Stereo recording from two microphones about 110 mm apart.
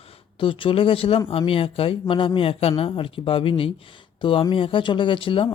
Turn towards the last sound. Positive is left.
turn(degrees=50)  # may be behind; listen again after turning